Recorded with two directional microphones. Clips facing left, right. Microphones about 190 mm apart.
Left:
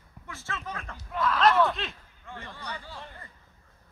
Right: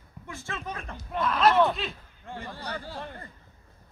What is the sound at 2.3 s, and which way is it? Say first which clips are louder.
Speech: right 3 dB; 35° right (ahead or behind).